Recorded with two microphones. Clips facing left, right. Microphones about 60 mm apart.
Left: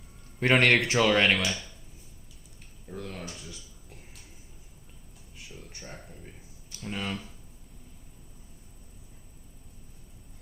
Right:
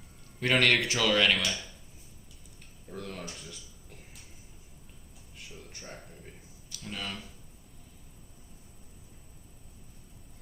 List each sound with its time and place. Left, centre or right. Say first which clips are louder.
0.5 s speech: left 3 dB; left
0.8 s speech: left 5 dB; left
1.0 s speech: left 1 dB; left
1.4 s speech: left 2 dB; centre
2.9 s a sound: left 1 dB; centre
5.5 s a sound: left 1 dB; centre
6.7 s speech: left 5 dB; left